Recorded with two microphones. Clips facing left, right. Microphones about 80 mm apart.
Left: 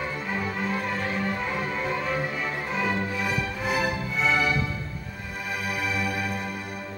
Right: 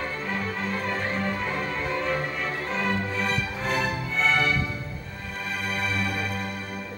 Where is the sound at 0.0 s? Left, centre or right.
Centre.